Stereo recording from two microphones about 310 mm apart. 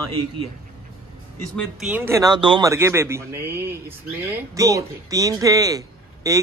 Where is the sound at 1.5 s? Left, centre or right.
Centre.